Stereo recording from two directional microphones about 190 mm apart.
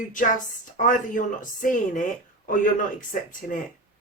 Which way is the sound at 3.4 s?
50° left (ahead or behind).